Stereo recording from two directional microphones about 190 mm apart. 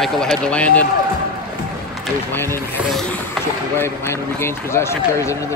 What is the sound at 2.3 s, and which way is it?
Speech, 10° left (ahead or behind).